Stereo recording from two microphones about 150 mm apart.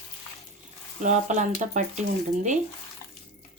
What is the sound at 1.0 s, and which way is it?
Speech, 55° right (ahead or behind).